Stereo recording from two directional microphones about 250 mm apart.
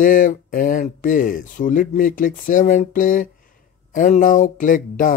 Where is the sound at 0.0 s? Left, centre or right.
Left.